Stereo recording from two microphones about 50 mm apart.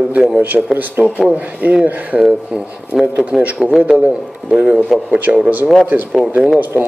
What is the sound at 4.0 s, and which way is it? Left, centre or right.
Speech, centre.